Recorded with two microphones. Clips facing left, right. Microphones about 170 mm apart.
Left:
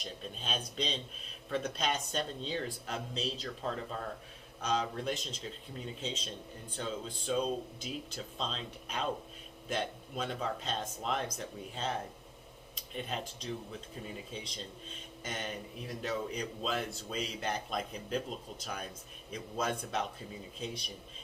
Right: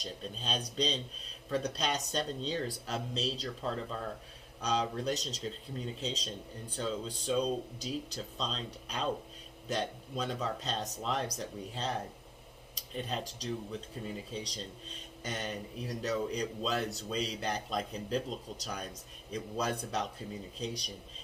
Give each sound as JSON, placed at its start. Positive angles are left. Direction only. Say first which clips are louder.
{"t": 0.0, "sound": "speech", "louder": "right 2 dB", "side_deg": -35}
{"t": 19.3, "sound": "speech", "louder": "right 1 dB", "side_deg": -35}